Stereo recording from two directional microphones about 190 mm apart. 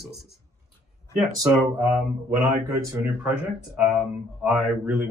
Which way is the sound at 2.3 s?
15° right (ahead or behind).